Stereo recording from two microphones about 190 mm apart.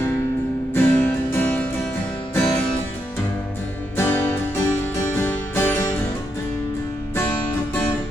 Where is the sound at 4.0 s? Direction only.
15° left (ahead or behind).